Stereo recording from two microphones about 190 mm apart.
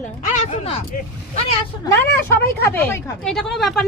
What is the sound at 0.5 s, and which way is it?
Speech, 30° left (ahead or behind).